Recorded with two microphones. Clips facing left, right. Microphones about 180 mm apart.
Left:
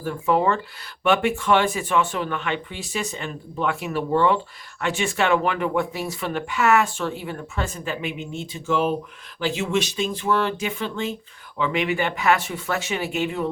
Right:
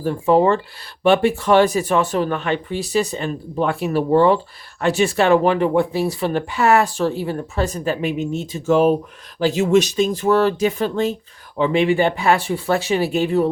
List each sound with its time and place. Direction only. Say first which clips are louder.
0.0 s speech: right 6 dB; 30° right (ahead or behind)